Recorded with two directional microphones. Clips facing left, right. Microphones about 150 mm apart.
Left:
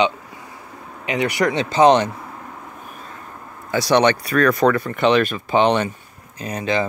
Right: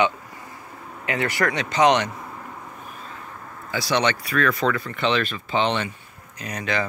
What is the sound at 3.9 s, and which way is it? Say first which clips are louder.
Speech: left 6 dB; 50° left (ahead or behind).